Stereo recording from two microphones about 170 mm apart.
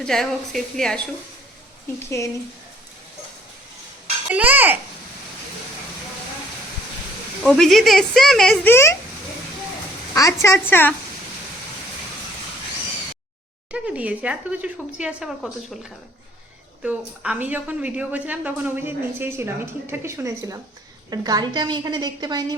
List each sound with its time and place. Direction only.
0.0 s speech: centre (ahead or behind)
2.0 s speech: 20° left (ahead or behind)
4.4 s speech: 10° right (ahead or behind)
7.4 s speech: 5° left (ahead or behind)
8.7 s speech: 15° left (ahead or behind)
10.4 s speech: 15° left (ahead or behind)
13.7 s a woman's voice: 5° right (ahead or behind); by 22.5 s 25° right (ahead or behind)